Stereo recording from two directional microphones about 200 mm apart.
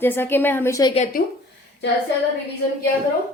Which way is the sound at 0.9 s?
35° left (ahead or behind).